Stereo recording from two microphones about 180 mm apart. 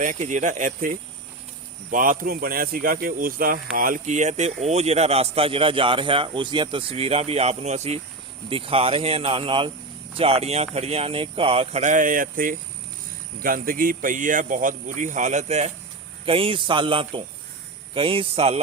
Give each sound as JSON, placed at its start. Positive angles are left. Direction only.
{"t": 0.0, "sound": "speech", "side_deg": -45}